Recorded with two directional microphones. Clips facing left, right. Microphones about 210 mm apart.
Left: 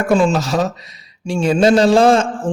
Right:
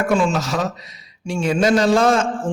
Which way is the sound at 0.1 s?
30° left (ahead or behind).